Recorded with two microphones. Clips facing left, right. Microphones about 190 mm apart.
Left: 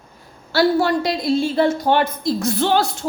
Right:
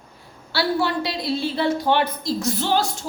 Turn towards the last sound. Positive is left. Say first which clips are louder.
# left 4 dB
turn(degrees=60)  # may be behind; listen again after turning